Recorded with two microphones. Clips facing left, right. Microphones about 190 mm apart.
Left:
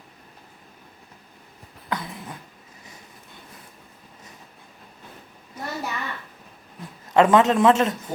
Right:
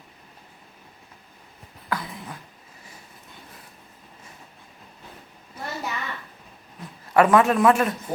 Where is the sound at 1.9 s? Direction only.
20° left (ahead or behind).